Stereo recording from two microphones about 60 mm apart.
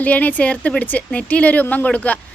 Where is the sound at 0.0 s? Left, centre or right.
Left.